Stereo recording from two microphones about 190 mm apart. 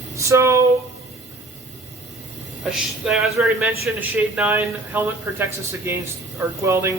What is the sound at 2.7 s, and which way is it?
Speech, 5° right (ahead or behind).